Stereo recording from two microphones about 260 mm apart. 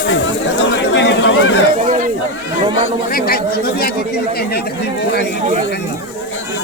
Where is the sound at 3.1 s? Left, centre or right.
Left.